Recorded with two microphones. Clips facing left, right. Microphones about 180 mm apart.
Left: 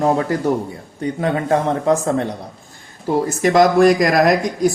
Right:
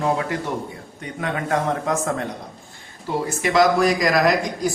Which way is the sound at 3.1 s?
45° left (ahead or behind).